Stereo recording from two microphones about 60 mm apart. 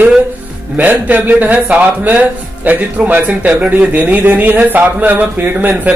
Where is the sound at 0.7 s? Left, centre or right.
Right.